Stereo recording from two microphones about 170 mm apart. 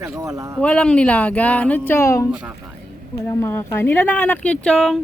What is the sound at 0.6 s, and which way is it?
Speech, 5° left (ahead or behind).